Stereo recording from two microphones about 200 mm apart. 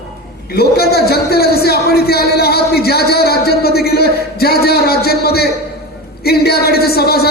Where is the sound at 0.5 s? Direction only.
50° left (ahead or behind).